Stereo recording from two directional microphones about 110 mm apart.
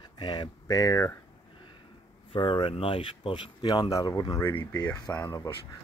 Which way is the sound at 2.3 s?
45° left (ahead or behind).